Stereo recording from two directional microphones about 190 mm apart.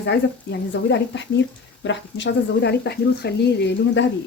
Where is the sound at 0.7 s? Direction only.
70° left (ahead or behind).